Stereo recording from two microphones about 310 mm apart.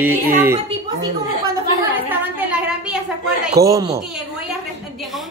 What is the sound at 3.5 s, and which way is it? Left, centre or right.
Speech, centre.